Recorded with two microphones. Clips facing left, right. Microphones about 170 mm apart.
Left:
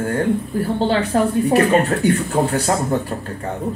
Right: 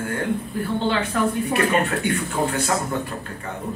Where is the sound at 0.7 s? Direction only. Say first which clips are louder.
Left 4 dB; 35° left (ahead or behind).